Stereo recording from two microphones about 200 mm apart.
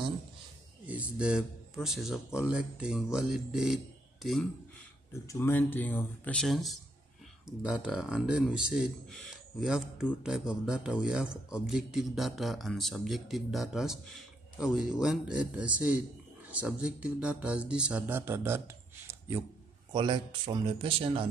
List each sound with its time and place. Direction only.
0.8 s a man's voice: 5° right (ahead or behind)
5.2 s a man's voice: 15° left (ahead or behind); by 18.6 s 10° right (ahead or behind)
19.0 s a sound: 15° right (ahead or behind)
19.9 s speech: 25° right (ahead or behind)